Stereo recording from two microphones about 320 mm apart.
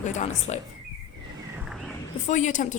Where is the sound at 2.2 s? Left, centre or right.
Left.